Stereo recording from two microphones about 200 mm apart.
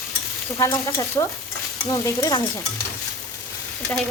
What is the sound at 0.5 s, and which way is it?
Speech, 15° left (ahead or behind).